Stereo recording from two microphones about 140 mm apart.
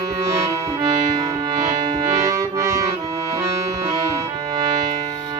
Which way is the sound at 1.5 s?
30° right (ahead or behind).